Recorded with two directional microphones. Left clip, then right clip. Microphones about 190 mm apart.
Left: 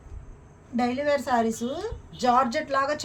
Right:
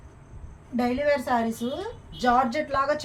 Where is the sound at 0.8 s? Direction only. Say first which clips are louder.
Right 1 dB; 35° left (ahead or behind).